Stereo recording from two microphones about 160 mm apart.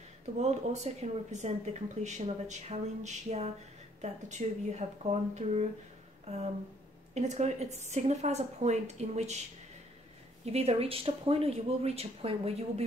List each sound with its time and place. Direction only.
0.4 s speech: 45° right (ahead or behind)
6.2 s a sound: 40° right (ahead or behind)
7.2 s speech: 45° right (ahead or behind)
10.4 s speech: 40° right (ahead or behind)